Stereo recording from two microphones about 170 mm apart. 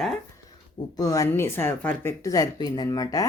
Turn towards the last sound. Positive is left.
turn(degrees=20)  # may be behind; listen again after turning